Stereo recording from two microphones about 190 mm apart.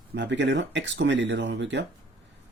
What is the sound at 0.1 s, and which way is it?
Speech, 70° right (ahead or behind).